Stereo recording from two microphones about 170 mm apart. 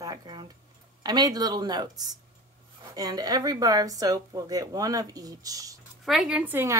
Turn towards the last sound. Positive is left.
turn(degrees=-10)  # may be behind; listen again after turning